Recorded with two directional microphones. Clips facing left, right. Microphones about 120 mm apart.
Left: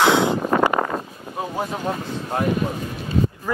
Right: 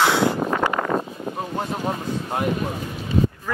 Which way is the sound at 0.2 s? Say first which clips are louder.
Left 2 dB; 20° left (ahead or behind).